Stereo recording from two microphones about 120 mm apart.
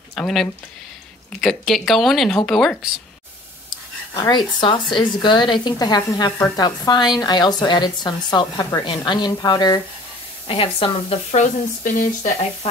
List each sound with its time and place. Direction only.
0.1 s speech: centre (ahead or behind)
4.1 s a woman's voice: 40° left (ahead or behind)
10.4 s speech: 50° left (ahead or behind)
11.3 s speech: 90° left